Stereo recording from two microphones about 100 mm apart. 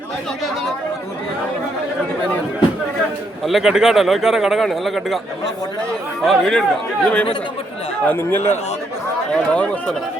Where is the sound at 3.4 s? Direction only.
5° right (ahead or behind).